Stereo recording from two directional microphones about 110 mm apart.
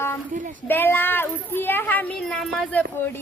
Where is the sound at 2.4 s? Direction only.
Centre (ahead or behind).